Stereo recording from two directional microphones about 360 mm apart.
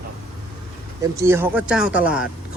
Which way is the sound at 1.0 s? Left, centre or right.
Centre.